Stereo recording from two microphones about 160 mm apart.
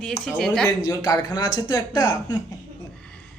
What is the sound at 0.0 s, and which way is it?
Speech, 5° left (ahead or behind).